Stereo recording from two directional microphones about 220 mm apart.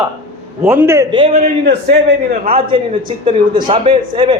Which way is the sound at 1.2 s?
30° right (ahead or behind).